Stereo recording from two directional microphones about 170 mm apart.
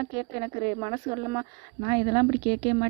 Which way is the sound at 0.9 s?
25° right (ahead or behind).